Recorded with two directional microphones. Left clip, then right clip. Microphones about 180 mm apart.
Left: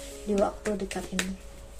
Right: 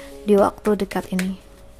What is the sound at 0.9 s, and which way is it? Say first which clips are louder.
Speech: right 10 dB; 45° right (ahead or behind).